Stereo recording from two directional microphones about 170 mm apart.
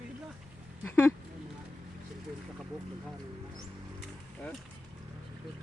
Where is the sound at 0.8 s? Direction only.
15° left (ahead or behind).